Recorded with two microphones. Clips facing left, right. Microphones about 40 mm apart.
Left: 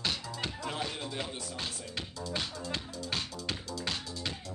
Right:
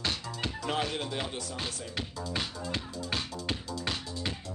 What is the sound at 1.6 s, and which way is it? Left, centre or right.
Music, centre.